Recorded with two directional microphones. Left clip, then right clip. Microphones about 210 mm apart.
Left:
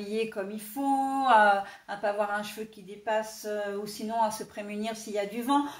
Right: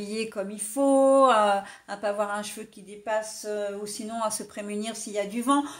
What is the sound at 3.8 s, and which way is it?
Speech, 50° right (ahead or behind).